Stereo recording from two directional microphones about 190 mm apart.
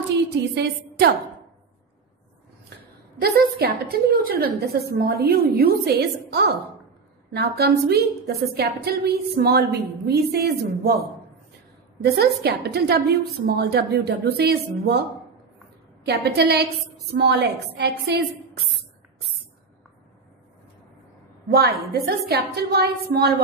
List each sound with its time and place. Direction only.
0.6 s a woman's voice: 55° right (ahead or behind)
3.2 s a woman's voice: 55° right (ahead or behind)
12.0 s a woman's voice: 55° right (ahead or behind)
16.1 s a woman's voice: 60° right (ahead or behind)
21.5 s a woman's voice: 55° right (ahead or behind)